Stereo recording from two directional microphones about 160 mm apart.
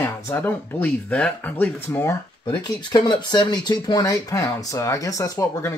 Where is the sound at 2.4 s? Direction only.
25° left (ahead or behind).